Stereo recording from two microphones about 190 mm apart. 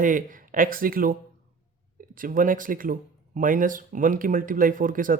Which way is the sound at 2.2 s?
45° right (ahead or behind).